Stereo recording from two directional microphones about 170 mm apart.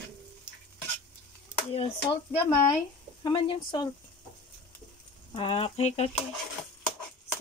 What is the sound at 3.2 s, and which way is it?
Speech, 25° left (ahead or behind).